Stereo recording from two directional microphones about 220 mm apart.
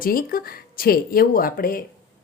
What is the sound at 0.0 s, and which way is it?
Speech, 40° left (ahead or behind).